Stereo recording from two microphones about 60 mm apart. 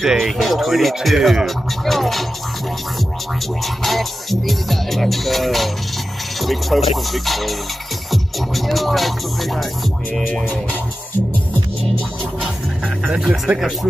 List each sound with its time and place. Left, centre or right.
0.0 s speech: centre
3.6 s speech: centre
13.1 s speech: centre